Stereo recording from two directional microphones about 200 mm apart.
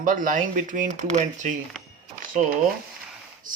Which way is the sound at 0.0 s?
40° right (ahead or behind).